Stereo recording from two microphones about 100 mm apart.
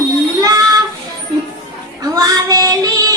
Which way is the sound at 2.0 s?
40° right (ahead or behind).